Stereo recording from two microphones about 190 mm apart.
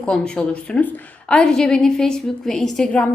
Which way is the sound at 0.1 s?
5° left (ahead or behind).